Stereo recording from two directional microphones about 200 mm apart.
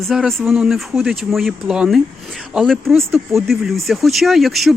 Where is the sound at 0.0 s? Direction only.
Centre (ahead or behind).